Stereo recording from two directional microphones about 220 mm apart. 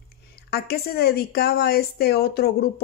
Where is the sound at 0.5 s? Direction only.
45° left (ahead or behind).